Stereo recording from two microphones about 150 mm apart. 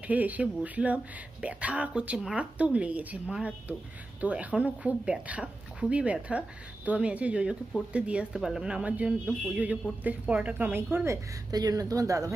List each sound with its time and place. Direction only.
0.0 s a woman's voice: 10° right (ahead or behind)
11.5 s speech: 25° right (ahead or behind)